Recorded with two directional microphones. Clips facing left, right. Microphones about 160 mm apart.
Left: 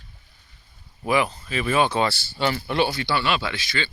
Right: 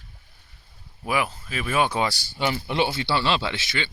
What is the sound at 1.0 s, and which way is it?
Speech, 5° right (ahead or behind).